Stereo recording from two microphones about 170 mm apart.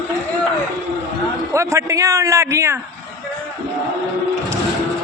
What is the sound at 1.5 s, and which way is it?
A man's voice, 15° right (ahead or behind).